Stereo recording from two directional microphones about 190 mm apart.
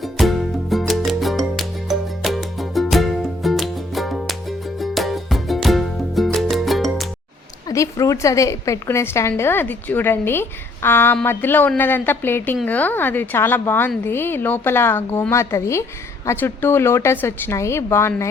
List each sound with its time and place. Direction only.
0.0 s music: centre (ahead or behind)
7.7 s a woman's voice: 15° left (ahead or behind)